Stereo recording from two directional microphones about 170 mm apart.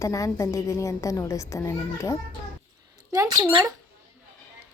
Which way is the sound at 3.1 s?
20° right (ahead or behind).